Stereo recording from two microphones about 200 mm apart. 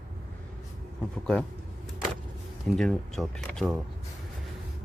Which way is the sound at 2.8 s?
5° left (ahead or behind).